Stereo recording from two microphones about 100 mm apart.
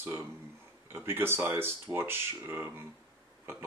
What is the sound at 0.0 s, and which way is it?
Speech, 25° right (ahead or behind).